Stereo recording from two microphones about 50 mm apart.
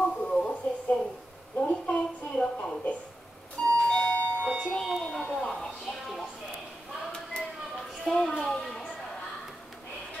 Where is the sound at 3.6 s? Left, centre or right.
Centre.